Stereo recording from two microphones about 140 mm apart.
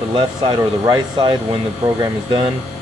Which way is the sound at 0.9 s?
30° right (ahead or behind).